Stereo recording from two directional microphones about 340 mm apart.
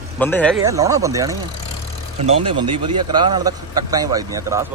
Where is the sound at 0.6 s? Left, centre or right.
Centre.